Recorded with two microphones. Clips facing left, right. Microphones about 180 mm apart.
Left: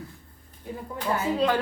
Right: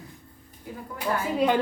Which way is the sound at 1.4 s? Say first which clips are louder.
Right 3 dB; 20° right (ahead or behind).